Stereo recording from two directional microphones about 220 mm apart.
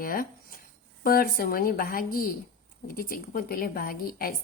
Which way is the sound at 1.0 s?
40° left (ahead or behind).